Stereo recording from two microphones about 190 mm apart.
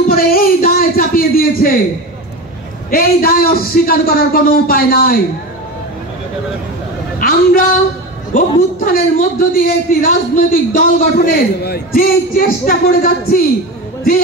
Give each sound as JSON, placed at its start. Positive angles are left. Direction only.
{"t": 0.1, "sound": "a man's voice", "side_deg": 50}
{"t": 2.9, "sound": "a man's voice", "side_deg": 50}
{"t": 7.2, "sound": "a man's voice", "side_deg": 50}